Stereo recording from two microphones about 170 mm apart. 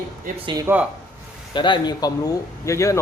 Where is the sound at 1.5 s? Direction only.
25° left (ahead or behind).